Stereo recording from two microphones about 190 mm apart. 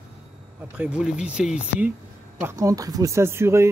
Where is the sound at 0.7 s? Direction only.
5° right (ahead or behind).